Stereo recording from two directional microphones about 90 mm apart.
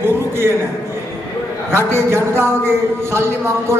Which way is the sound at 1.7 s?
30° right (ahead or behind).